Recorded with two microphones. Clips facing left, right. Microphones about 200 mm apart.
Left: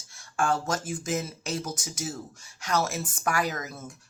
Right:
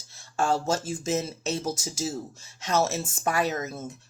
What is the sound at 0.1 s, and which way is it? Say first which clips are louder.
Speech: right 1 dB; 25° right (ahead or behind).